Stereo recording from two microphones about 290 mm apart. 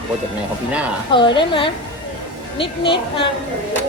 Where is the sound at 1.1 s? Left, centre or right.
Centre.